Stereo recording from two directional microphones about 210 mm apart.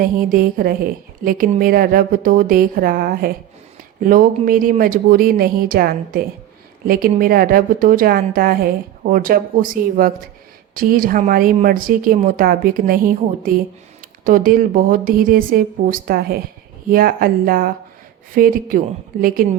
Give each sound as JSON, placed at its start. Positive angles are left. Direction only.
{"t": 0.0, "sound": "a woman's voice", "side_deg": -40}